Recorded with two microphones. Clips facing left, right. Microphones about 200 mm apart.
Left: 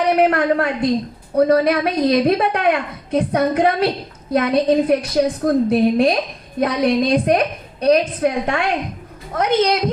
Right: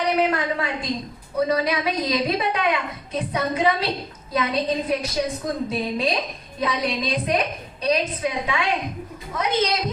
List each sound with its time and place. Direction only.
0.2 s a woman's voice: 60° left (ahead or behind)